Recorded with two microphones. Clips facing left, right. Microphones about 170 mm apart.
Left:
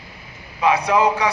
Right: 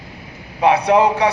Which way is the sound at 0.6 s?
60° right (ahead or behind).